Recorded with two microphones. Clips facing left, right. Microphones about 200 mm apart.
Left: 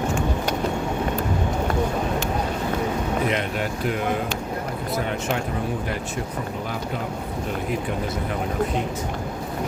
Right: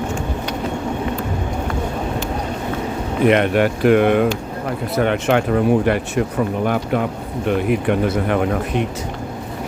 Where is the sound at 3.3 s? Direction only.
65° right (ahead or behind).